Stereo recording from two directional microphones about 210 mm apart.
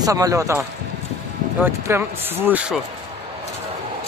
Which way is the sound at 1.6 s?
10° right (ahead or behind).